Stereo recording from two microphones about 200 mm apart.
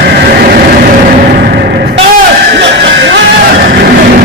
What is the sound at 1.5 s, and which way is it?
Music, 55° right (ahead or behind).